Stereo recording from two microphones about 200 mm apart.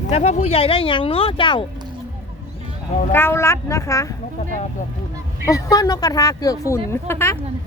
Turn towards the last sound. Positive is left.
turn(degrees=10)  # may be behind; listen again after turning